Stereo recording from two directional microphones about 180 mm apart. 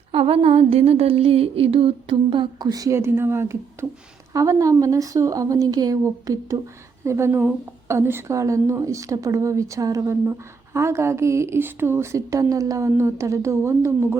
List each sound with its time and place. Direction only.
0.1 s a woman's voice: 30° right (ahead or behind); by 14.2 s 15° right (ahead or behind)